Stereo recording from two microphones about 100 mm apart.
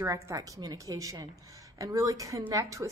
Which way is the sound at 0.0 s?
30° right (ahead or behind).